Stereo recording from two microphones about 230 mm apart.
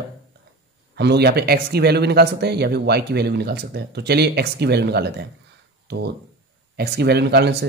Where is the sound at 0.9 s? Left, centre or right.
Right.